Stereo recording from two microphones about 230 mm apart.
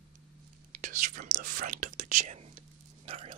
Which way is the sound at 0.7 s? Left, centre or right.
Right.